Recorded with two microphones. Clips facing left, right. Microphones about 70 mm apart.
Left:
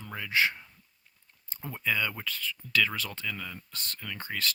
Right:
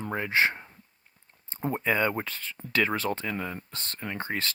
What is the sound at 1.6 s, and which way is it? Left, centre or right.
Speech, right.